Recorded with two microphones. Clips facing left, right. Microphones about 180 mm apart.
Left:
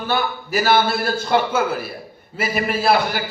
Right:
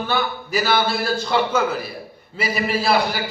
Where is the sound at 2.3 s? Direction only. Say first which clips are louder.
Even; 50° left (ahead or behind).